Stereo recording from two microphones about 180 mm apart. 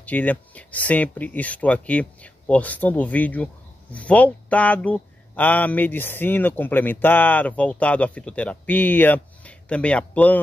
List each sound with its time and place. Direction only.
0.0 s speech: 10° left (ahead or behind)